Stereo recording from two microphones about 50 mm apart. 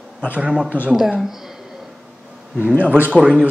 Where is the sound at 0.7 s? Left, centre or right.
Left.